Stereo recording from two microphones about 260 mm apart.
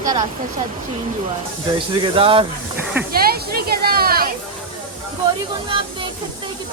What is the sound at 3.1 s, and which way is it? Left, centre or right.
Speech, right.